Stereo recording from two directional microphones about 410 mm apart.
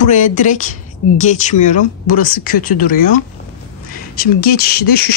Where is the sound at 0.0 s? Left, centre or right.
Centre.